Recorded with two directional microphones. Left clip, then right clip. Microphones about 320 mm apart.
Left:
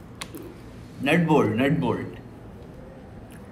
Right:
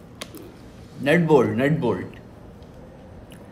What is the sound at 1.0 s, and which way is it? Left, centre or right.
Speech, right.